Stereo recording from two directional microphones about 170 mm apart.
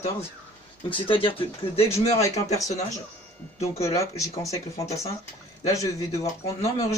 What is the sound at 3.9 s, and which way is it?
Speech, 20° left (ahead or behind).